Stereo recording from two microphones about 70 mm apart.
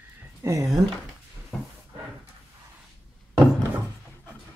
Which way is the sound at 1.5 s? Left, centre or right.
Centre.